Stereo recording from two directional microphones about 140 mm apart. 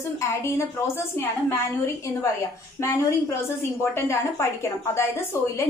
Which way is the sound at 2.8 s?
20° left (ahead or behind).